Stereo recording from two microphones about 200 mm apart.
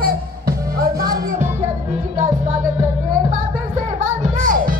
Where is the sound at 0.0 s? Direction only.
50° right (ahead or behind).